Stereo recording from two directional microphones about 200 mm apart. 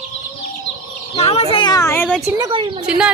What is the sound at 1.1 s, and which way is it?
Speech, 30° left (ahead or behind).